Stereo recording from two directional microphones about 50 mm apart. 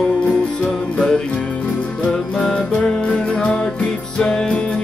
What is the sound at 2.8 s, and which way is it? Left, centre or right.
Music, centre.